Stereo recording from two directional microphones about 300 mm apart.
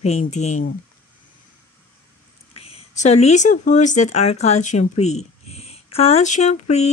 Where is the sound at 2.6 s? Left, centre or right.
Centre.